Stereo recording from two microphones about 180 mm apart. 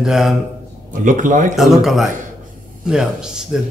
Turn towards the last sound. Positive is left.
turn(degrees=-5)  # may be behind; listen again after turning